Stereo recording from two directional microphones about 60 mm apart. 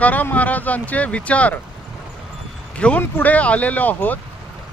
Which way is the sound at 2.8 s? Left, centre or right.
Left.